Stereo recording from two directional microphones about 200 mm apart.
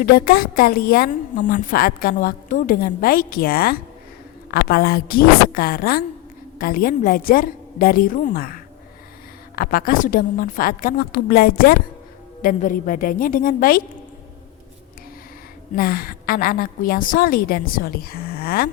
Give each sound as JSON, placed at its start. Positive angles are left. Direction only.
{"t": 0.0, "sound": "a woman's voice", "side_deg": 45}
{"t": 15.7, "sound": "a woman's voice", "side_deg": 50}